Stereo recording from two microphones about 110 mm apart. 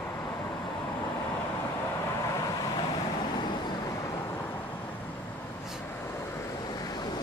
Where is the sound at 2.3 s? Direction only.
30° left (ahead or behind).